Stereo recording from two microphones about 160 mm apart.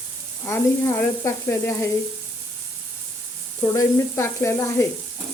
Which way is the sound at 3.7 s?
15° left (ahead or behind).